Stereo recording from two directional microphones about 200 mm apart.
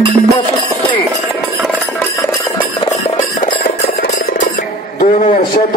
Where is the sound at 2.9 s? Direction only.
35° left (ahead or behind).